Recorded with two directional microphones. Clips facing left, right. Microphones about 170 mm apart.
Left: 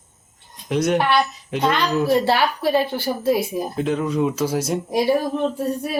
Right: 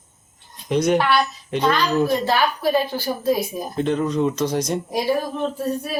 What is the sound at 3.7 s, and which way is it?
A man's voice, 5° left (ahead or behind).